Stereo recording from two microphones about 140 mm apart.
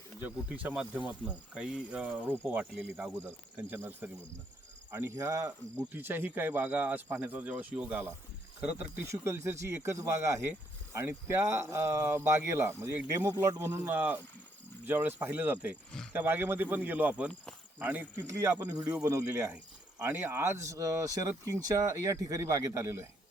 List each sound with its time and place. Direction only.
0.2 s speech: 10° right (ahead or behind)
18.7 s speech: 25° right (ahead or behind)